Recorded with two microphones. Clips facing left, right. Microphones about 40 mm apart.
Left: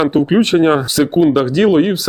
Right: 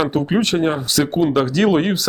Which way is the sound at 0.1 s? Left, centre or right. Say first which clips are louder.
Left 6 dB; left.